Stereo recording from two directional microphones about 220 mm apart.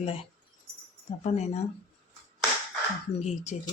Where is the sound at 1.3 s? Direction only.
30° left (ahead or behind).